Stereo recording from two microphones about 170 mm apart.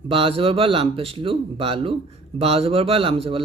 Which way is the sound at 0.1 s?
35° right (ahead or behind).